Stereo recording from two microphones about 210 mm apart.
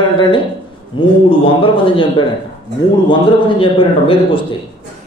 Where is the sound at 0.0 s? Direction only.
20° left (ahead or behind).